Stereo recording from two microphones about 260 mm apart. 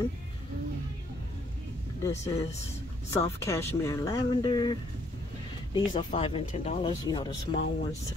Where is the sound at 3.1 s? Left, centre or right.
Centre.